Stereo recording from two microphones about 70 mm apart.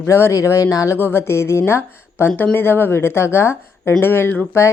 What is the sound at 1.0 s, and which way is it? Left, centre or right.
Speech, left.